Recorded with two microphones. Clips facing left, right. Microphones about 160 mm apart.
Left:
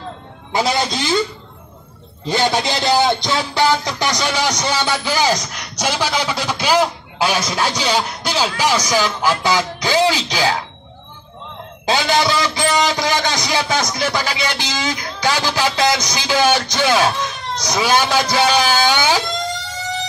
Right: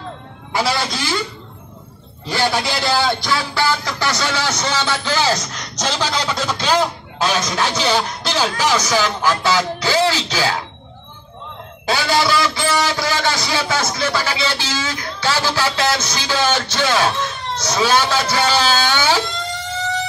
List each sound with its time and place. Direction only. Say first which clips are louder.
0.5 s a man's voice: left 2 dB; 20° left (ahead or behind)
2.2 s a man's voice: left 2 dB; 20° left (ahead or behind)
11.8 s a man's voice: left 1 dB; 20° left (ahead or behind)